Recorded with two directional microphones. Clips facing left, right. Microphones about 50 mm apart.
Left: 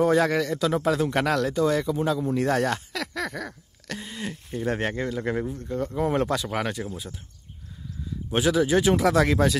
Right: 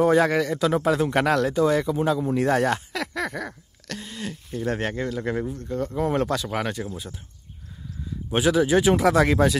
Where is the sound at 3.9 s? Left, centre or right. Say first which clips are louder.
Even; centre.